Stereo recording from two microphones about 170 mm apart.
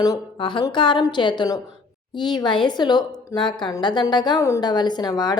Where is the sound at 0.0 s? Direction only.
25° left (ahead or behind).